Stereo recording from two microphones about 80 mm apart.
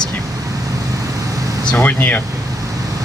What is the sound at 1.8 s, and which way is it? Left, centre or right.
Speech, left.